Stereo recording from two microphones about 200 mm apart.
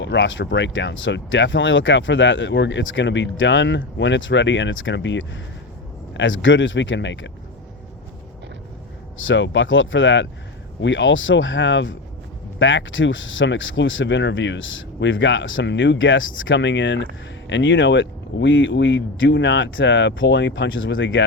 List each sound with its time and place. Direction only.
0.0 s speech: 65° left (ahead or behind)
9.1 s speech: 70° left (ahead or behind)